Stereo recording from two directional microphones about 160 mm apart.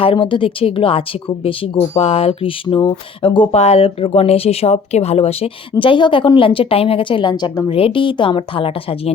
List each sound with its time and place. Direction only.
0.0 s speech: 30° left (ahead or behind)